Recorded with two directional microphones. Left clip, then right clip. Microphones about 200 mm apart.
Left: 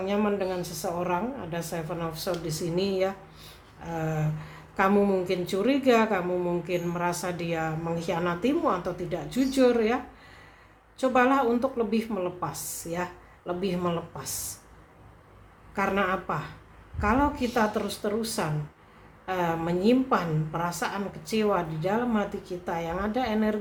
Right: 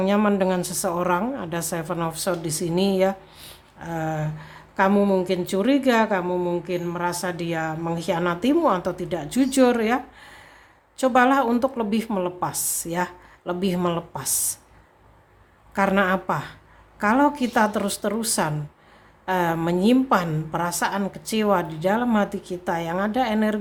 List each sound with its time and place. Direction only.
0.0 s a woman's voice: 35° right (ahead or behind)
15.7 s a woman's voice: 30° right (ahead or behind)